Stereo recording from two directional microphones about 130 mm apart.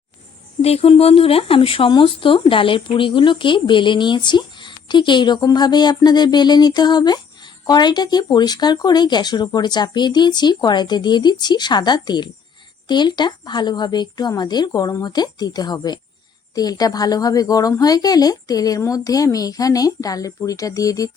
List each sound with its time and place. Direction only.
0.6 s speech: 50° left (ahead or behind); by 21.1 s 25° left (ahead or behind)